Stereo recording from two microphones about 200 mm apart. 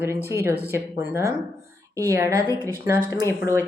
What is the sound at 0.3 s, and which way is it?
A woman's voice, 15° right (ahead or behind).